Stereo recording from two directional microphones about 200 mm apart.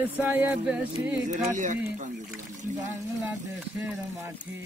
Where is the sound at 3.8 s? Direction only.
10° right (ahead or behind).